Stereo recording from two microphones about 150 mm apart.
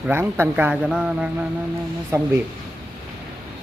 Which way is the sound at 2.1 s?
20° right (ahead or behind).